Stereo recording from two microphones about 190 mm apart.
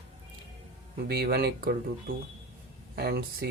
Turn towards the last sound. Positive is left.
turn(degrees=-55)  # may be behind; listen again after turning